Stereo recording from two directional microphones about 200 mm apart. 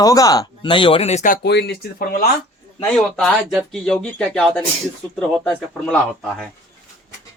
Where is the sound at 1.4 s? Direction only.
55° left (ahead or behind).